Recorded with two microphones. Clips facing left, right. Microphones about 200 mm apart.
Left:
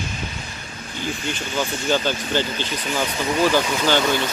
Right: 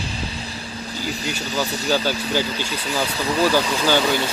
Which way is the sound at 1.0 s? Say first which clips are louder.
Left 1 dB; 35° right (ahead or behind).